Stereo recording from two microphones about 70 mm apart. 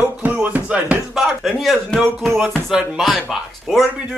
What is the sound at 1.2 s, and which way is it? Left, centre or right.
Speech, centre.